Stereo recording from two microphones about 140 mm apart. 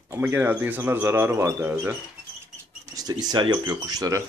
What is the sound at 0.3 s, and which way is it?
Speech, 15° right (ahead or behind).